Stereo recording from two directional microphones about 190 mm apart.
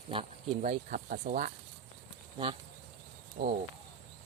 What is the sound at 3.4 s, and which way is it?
Speech, 40° right (ahead or behind).